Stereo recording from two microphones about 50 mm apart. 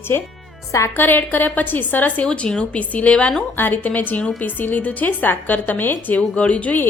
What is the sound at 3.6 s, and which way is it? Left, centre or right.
A woman's voice, left.